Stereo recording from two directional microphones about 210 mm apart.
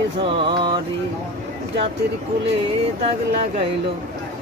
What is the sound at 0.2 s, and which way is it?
Mantra, 25° right (ahead or behind).